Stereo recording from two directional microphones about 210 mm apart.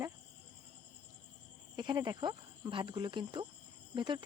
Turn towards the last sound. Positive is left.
turn(degrees=-20)  # may be behind; listen again after turning